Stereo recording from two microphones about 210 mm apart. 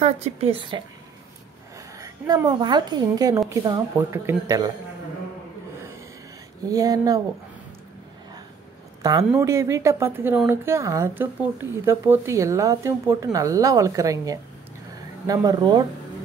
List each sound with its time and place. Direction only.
0.0 s a woman's voice: 30° right (ahead or behind)
2.0 s a woman's voice: 15° right (ahead or behind)
6.7 s speech: 15° right (ahead or behind)
9.0 s a woman's voice: 15° right (ahead or behind)